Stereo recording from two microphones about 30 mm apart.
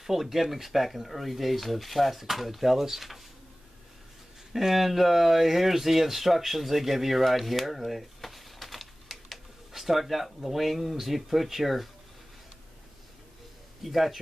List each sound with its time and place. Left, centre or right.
0.0 s speech: centre
4.5 s speech: centre
13.8 s speech: centre